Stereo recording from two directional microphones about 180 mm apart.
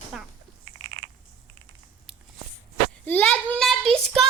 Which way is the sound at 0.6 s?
80° right.